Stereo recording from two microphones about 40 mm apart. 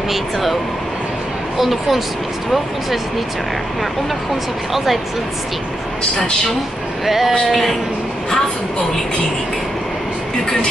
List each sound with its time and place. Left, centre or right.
0.1 s speech: centre
1.6 s speech: centre
4.7 s speech: centre
7.1 s speech: centre